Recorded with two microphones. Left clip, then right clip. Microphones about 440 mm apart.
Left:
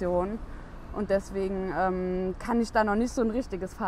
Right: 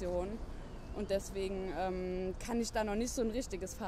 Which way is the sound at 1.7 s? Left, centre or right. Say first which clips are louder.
Left 10 dB; left.